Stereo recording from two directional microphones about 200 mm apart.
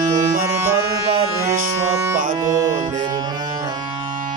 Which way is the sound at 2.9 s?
40° right (ahead or behind).